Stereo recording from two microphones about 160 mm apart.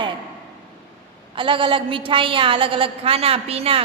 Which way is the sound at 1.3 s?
30° right (ahead or behind).